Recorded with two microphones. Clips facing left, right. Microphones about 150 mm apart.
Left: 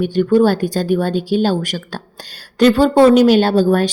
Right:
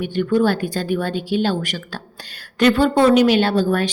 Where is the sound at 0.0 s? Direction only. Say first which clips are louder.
Left 5 dB; 40° left (ahead or behind).